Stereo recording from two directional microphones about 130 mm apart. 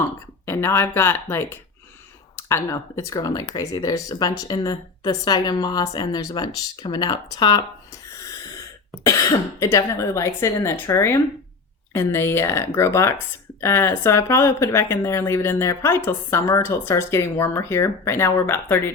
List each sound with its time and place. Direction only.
0.4 s speech: 20° left (ahead or behind)
9.0 s speech: 25° left (ahead or behind)